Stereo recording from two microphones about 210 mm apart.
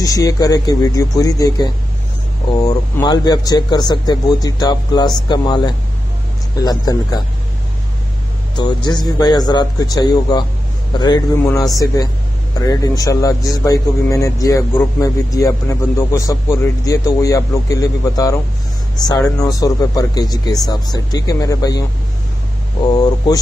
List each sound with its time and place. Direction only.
0.0 s speech: 15° left (ahead or behind)
8.5 s speech: 20° left (ahead or behind)
22.8 s speech: 20° left (ahead or behind)